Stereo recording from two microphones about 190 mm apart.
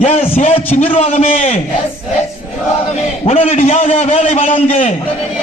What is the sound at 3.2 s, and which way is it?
A man's voice, 30° left (ahead or behind).